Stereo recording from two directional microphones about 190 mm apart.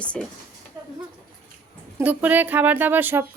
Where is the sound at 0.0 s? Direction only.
5° left (ahead or behind).